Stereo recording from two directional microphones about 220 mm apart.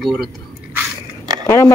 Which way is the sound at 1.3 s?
15° right (ahead or behind).